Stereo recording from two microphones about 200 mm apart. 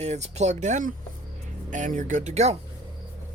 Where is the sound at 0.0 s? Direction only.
35° right (ahead or behind).